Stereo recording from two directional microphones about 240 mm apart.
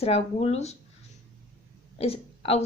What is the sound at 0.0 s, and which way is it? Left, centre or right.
Speech, left.